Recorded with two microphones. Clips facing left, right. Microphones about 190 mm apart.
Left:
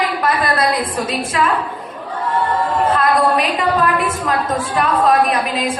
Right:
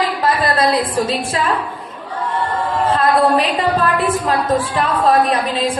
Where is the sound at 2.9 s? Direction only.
30° right (ahead or behind).